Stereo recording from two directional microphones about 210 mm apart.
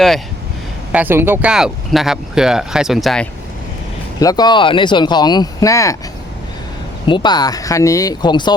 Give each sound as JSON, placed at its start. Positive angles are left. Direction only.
{"t": 0.9, "sound": "speech", "side_deg": -10}
{"t": 4.2, "sound": "speech", "side_deg": 20}
{"t": 7.1, "sound": "speech", "side_deg": 20}